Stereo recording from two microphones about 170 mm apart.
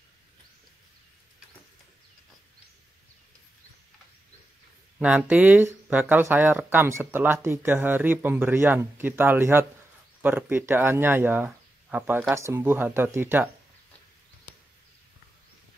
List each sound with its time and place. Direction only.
4.9 s speech: 5° right (ahead or behind)